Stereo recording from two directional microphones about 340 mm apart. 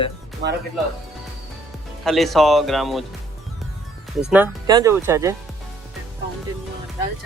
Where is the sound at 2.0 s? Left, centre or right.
Centre.